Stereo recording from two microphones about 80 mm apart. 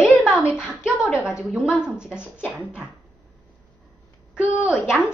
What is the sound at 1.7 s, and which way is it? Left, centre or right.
A woman's voice, centre.